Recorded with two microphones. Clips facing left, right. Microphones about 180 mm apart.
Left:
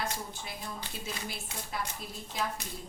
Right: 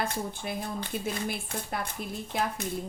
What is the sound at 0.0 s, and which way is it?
A woman's voice, 55° right (ahead or behind).